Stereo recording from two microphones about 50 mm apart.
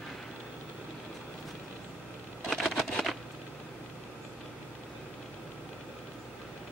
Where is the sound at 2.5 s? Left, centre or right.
Centre.